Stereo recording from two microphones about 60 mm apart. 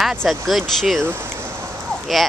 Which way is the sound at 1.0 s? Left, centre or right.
Right.